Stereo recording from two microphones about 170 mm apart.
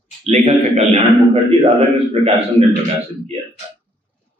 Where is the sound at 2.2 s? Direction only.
35° right (ahead or behind).